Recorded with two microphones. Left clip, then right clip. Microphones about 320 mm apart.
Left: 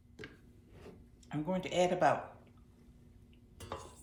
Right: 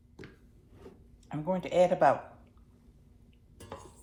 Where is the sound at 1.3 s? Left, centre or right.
Centre.